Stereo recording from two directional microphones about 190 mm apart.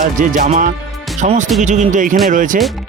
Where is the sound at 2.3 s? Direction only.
45° right (ahead or behind).